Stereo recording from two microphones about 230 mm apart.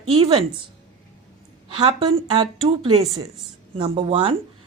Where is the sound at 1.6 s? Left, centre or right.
Right.